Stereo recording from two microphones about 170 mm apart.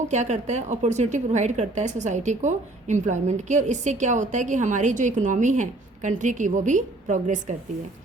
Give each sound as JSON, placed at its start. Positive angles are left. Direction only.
{"t": 0.1, "sound": "a woman's voice", "side_deg": -45}